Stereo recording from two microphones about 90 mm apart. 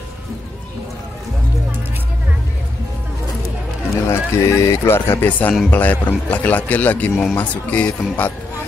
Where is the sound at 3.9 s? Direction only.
35° left (ahead or behind).